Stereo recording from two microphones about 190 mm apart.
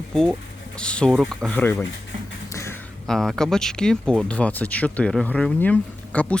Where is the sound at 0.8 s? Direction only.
5° left (ahead or behind).